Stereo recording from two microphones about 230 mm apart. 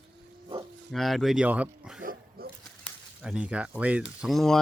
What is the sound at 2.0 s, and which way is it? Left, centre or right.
Dog, right.